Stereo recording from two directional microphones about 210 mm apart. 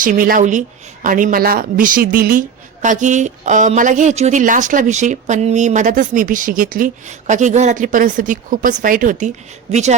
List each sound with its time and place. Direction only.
0.0 s a woman's voice: 40° right (ahead or behind)